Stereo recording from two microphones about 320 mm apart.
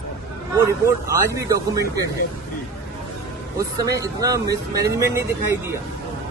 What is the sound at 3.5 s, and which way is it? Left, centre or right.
Speech, centre.